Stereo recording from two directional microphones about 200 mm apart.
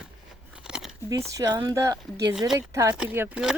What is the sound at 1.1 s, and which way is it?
A woman's voice, 15° right (ahead or behind).